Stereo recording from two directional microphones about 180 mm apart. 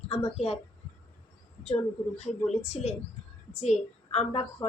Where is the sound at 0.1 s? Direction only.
35° left (ahead or behind).